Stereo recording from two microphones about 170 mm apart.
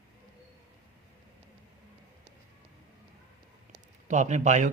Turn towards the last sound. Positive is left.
turn(degrees=-45)  # may be behind; listen again after turning